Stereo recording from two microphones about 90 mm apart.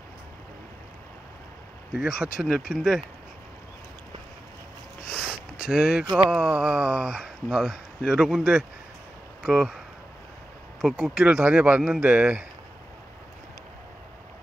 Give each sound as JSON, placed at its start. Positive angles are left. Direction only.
{"t": 2.0, "sound": "speech", "side_deg": -5}
{"t": 5.3, "sound": "a sound", "side_deg": -10}
{"t": 6.1, "sound": "speech", "side_deg": -10}
{"t": 10.8, "sound": "speech", "side_deg": 0}